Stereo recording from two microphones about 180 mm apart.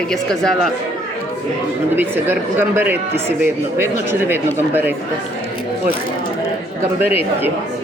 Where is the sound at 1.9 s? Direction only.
10° right (ahead or behind).